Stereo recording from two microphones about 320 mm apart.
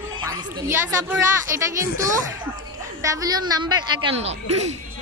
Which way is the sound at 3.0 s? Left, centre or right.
Centre.